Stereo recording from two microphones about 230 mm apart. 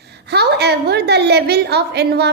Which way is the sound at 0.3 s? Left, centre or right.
Right.